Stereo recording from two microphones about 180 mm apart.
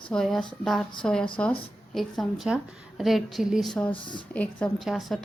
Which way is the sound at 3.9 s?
25° left (ahead or behind).